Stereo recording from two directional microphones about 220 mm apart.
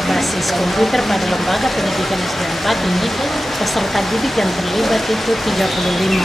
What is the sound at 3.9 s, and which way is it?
Speech, centre (ahead or behind).